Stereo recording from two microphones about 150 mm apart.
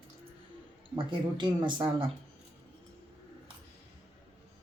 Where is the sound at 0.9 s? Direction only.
30° right (ahead or behind).